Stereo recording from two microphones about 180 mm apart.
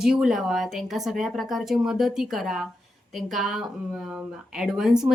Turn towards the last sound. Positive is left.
turn(degrees=-5)  # may be behind; listen again after turning